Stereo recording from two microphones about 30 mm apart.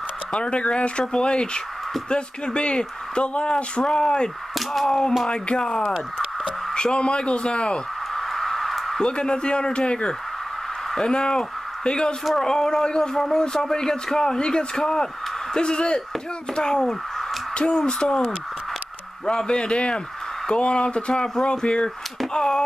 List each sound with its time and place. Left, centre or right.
0.3 s speech: left
3.8 s speech: left
5.8 s speech: centre
6.4 s speech: left
8.1 s a sound: centre
9.0 s speech: left
21.1 s speech: left